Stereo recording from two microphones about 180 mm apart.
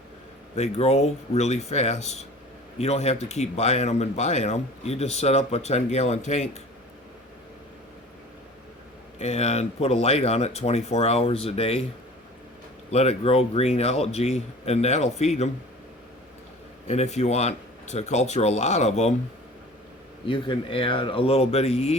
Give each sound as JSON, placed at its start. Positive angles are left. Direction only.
{"t": 0.5, "sound": "speech", "side_deg": 35}
{"t": 9.1, "sound": "speech", "side_deg": 35}
{"t": 12.9, "sound": "speech", "side_deg": 35}
{"t": 16.9, "sound": "speech", "side_deg": 40}
{"t": 20.2, "sound": "speech", "side_deg": 30}